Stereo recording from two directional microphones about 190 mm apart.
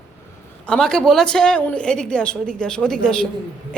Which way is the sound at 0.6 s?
5° left (ahead or behind).